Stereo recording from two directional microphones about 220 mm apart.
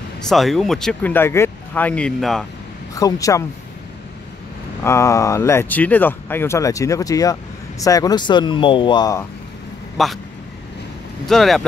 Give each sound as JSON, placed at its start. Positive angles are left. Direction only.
{"t": 0.2, "sound": "speech", "side_deg": 0}
{"t": 2.9, "sound": "speech", "side_deg": 15}
{"t": 4.8, "sound": "speech", "side_deg": 10}
{"t": 10.0, "sound": "speech", "side_deg": 0}
{"t": 11.2, "sound": "speech", "side_deg": 0}